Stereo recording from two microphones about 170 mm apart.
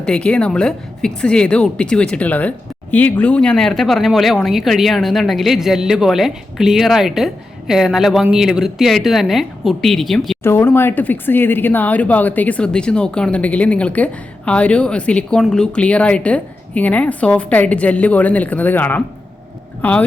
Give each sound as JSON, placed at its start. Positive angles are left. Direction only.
{"t": 0.0, "sound": "speech", "side_deg": 5}
{"t": 10.4, "sound": "speech", "side_deg": 15}